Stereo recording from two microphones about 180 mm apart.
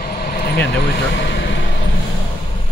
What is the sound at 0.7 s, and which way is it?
Speech, 70° left (ahead or behind).